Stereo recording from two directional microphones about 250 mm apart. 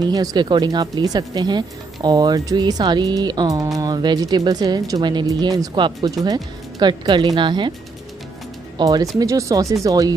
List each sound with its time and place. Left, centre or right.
0.0 s speech: centre
8.7 s speech: centre